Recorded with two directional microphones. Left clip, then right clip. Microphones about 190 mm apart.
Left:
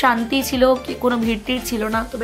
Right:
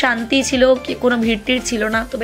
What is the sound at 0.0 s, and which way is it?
A woman's voice, 5° right (ahead or behind).